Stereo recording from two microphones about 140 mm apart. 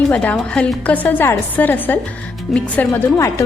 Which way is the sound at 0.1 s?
10° left (ahead or behind).